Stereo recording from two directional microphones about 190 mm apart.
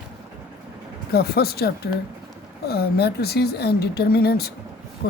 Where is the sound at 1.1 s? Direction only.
55° left (ahead or behind).